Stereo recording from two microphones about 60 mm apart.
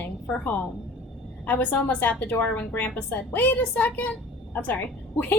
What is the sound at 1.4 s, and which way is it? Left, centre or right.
A woman's voice, left.